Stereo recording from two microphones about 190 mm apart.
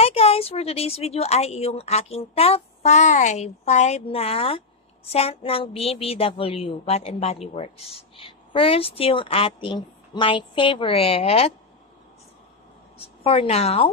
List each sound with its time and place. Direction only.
0.0 s a woman's voice: 30° left (ahead or behind)
12.9 s a woman's voice: 30° left (ahead or behind)